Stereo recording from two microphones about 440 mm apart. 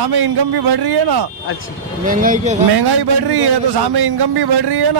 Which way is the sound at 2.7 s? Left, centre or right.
Right.